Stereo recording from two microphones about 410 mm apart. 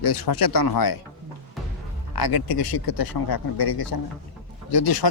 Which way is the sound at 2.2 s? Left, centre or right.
Left.